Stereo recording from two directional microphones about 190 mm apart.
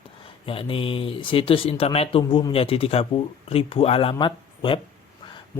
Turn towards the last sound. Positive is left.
turn(degrees=25)  # may be behind; listen again after turning